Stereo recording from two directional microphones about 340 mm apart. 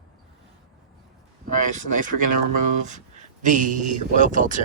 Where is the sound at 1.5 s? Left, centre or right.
Right.